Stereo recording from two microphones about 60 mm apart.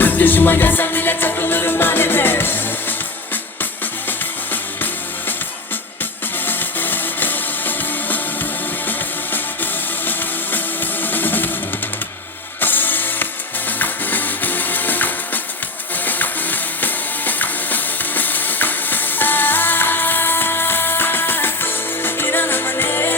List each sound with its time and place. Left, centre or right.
0.0 s music: left
6.4 s music: left
11.0 s music: left
12.5 s music: left